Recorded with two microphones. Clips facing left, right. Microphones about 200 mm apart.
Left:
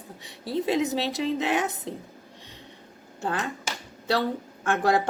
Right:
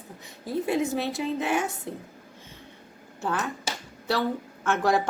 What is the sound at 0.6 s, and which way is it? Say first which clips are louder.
A woman's voice: left 1 dB; 20° left (ahead or behind).